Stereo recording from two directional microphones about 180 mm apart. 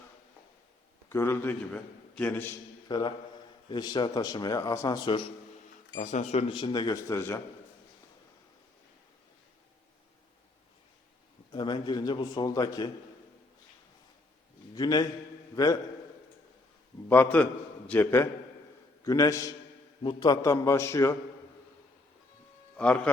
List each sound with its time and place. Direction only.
1.1 s a man's voice: 15° left (ahead or behind)
2.9 s speech: 25° left (ahead or behind)
5.9 s speech: 40° left (ahead or behind); by 7.4 s 15° left (ahead or behind)
11.5 s speech: 25° left (ahead or behind)
14.8 s speech: 20° left (ahead or behind)
17.3 s a man's voice: 10° left (ahead or behind)
22.8 s a man's voice: 5° left (ahead or behind)